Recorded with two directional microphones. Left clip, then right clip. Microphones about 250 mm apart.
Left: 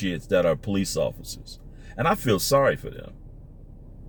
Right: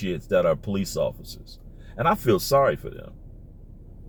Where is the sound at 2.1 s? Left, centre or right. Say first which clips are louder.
Right 1 dB; centre.